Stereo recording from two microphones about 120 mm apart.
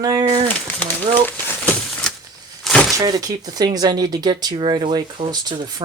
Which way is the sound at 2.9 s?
30° right (ahead or behind).